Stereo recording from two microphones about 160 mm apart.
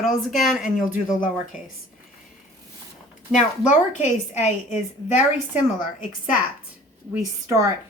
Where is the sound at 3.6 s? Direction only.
50° left (ahead or behind).